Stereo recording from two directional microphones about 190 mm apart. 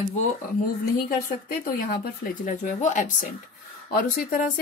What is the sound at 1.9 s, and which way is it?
A woman's voice, 45° left (ahead or behind).